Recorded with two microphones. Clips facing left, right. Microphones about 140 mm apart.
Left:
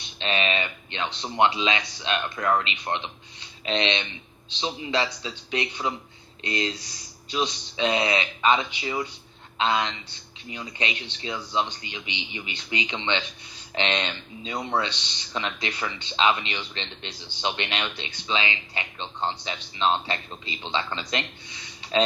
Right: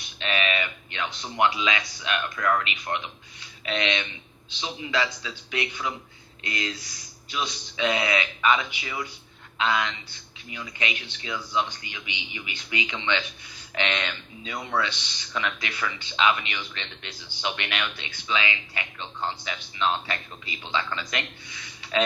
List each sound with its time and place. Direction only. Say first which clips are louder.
0.2 s speech: left 1 dB; 25° left (ahead or behind)